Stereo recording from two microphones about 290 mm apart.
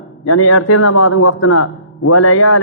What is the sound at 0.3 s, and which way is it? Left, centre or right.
A man's voice, left.